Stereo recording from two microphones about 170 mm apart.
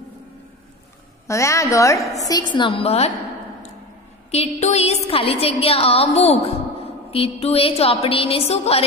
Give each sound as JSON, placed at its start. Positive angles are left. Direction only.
{"t": 1.2, "sound": "a woman's voice", "side_deg": 15}
{"t": 4.3, "sound": "a woman's voice", "side_deg": 40}